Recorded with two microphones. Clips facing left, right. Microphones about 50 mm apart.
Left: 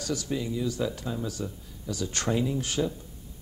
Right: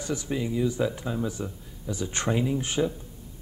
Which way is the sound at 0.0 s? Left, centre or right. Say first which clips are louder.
Right 1 dB; right.